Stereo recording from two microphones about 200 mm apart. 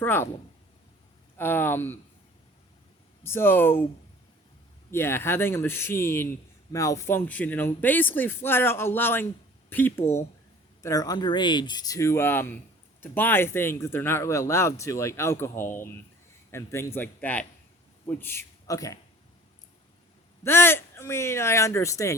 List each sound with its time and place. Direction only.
0.0 s speech: 10° left (ahead or behind)
1.4 s speech: 10° left (ahead or behind)
3.2 s speech: 10° left (ahead or behind)
4.9 s speech: 10° left (ahead or behind)
20.4 s speech: 10° left (ahead or behind)